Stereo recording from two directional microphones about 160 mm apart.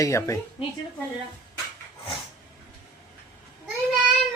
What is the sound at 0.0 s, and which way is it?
Speech, 20° left (ahead or behind).